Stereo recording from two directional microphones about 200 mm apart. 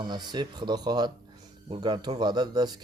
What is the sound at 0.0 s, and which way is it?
Speech, 20° right (ahead or behind).